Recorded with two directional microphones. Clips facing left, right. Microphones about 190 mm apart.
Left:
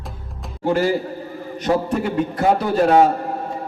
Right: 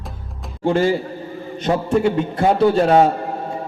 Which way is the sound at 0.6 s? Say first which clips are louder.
Right 1 dB; 25° right (ahead or behind).